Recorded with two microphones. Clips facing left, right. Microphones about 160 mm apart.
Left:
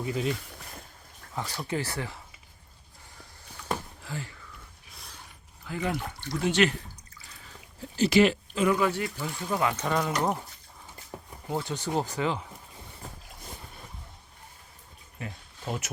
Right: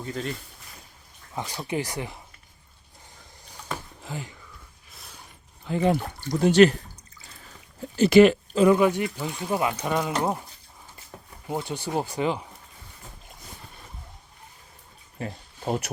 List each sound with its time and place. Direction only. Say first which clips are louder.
0.0 s speech: left 2 dB; 5° left (ahead or behind)
1.4 s speech: right 2 dB; 15° right (ahead or behind)
4.0 s speech: right 2 dB; 15° right (ahead or behind)
4.9 s horse: right 1 dB; centre (ahead or behind)
5.6 s speech: right 8 dB; 30° right (ahead or behind)
7.9 s speech: right 6 dB; 55° right (ahead or behind)
8.5 s speech: right 7 dB; 35° right (ahead or behind)
8.8 s speech: right 5 dB; 15° right (ahead or behind)
11.4 s speech: right 1 dB; 15° right (ahead or behind)
15.2 s a sound: right 6 dB; 45° right (ahead or behind)